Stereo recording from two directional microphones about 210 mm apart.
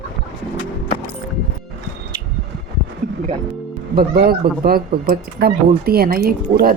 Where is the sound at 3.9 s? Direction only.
45° right (ahead or behind).